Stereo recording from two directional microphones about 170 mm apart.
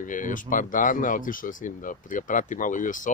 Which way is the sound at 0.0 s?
50° left (ahead or behind).